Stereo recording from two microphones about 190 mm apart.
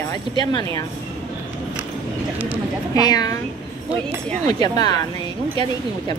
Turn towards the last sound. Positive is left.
turn(degrees=20)  # may be behind; listen again after turning